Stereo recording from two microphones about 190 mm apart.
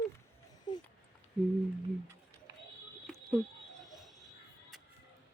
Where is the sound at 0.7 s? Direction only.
20° left (ahead or behind).